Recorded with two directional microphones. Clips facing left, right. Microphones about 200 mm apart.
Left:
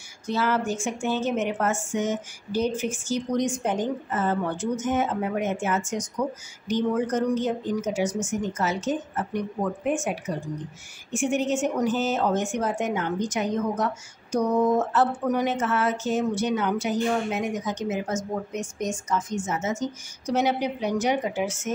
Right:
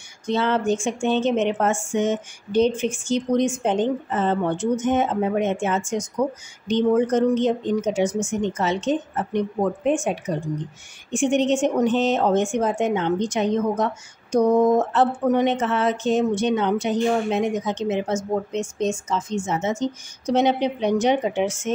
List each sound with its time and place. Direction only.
0.3 s speech: 25° right (ahead or behind)
11.5 s speech: 30° right (ahead or behind)